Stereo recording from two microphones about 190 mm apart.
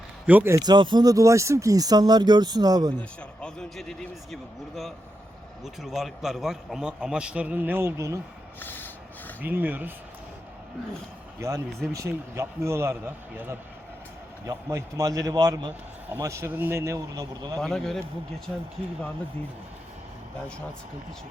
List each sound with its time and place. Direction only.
0.3 s speech: 10° right (ahead or behind)
3.0 s a man's voice: 5° left (ahead or behind); by 8.2 s 15° right (ahead or behind)
8.5 s snort: 10° left (ahead or behind)
9.4 s a man's voice: 10° right (ahead or behind)
11.3 s a man's voice: 15° right (ahead or behind)
17.6 s a man's voice: centre (ahead or behind)